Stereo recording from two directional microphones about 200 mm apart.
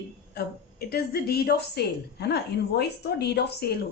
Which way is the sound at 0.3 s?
50° left (ahead or behind).